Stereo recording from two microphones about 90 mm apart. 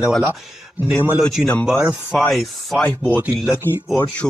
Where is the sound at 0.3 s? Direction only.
20° right (ahead or behind).